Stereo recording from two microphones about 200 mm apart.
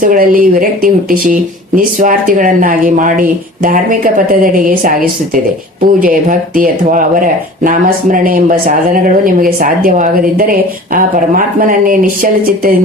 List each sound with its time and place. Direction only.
0.0 s speech: 45° right (ahead or behind)